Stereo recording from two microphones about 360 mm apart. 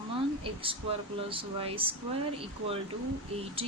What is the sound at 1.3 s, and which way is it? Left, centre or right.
Speech, centre.